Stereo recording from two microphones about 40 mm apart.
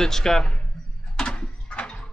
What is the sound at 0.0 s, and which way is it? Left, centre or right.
Speech, centre.